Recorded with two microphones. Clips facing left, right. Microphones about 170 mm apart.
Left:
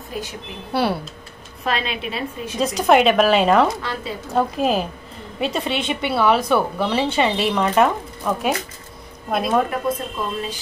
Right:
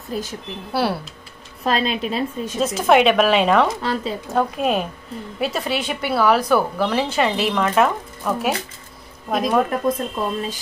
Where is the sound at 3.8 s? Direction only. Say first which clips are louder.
Right 4 dB; 35° right (ahead or behind).